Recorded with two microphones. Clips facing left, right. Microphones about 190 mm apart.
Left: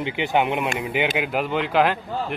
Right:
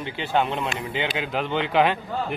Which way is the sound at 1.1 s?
5° left (ahead or behind).